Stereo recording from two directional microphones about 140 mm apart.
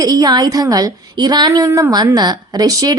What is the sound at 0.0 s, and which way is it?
A woman's voice, 30° right (ahead or behind).